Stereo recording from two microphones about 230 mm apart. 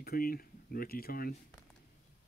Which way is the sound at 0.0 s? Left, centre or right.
Left.